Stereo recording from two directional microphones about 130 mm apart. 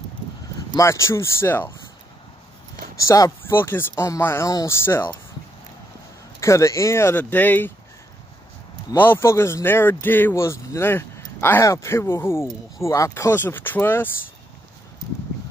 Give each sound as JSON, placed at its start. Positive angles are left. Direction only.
{"t": 0.7, "sound": "speech", "side_deg": 20}
{"t": 3.0, "sound": "speech", "side_deg": 25}
{"t": 6.4, "sound": "speech", "side_deg": 20}
{"t": 8.9, "sound": "speech", "side_deg": 15}